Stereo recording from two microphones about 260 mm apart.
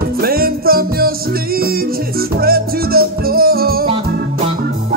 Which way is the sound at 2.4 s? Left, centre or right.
Right.